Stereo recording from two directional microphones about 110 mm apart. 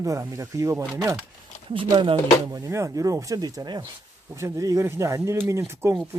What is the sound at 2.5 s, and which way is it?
Speech, 30° right (ahead or behind).